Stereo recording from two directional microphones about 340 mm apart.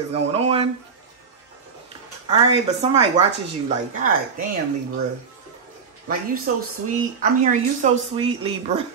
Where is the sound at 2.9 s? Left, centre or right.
Centre.